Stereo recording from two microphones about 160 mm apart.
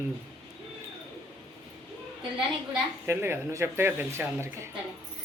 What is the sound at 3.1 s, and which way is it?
Speech, 15° right (ahead or behind).